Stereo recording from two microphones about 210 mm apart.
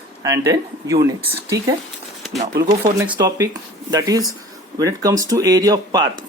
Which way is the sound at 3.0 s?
15° right (ahead or behind).